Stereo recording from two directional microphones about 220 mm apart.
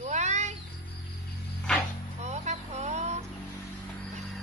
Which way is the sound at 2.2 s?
30° right (ahead or behind).